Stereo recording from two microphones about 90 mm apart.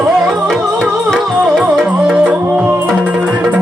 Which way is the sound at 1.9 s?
15° right (ahead or behind).